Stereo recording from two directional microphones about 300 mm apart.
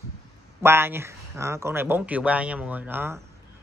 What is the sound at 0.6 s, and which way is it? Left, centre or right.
Speech, centre.